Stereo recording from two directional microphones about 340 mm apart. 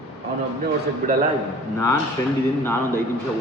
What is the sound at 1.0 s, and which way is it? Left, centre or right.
Speech, right.